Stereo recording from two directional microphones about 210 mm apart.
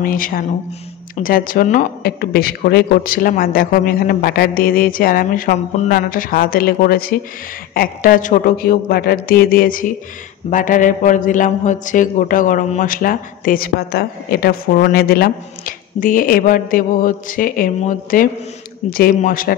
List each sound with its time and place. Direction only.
0.0 s a man's voice: 40° left (ahead or behind)